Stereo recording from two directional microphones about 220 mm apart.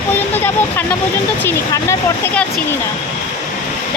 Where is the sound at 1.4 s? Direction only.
10° left (ahead or behind).